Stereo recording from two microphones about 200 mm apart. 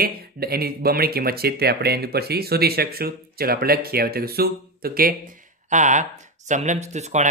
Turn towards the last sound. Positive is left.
turn(degrees=-35)  # may be behind; listen again after turning